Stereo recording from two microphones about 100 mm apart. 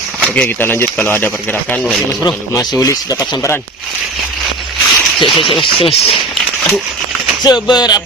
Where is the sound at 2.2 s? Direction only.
40° left (ahead or behind).